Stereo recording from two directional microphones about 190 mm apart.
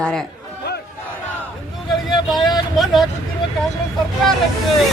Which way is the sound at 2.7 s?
Centre (ahead or behind).